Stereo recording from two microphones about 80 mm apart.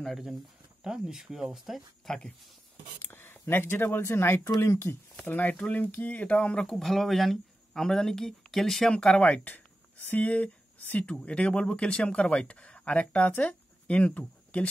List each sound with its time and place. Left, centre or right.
0.8 s speech: centre
2.0 s speech: centre
3.0 s speech: left
5.2 s speech: left